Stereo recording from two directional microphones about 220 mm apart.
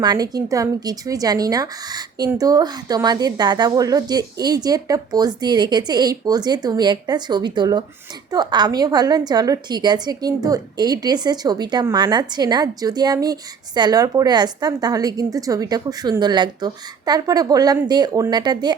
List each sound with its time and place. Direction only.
0.0 s a woman's voice: 20° right (ahead or behind)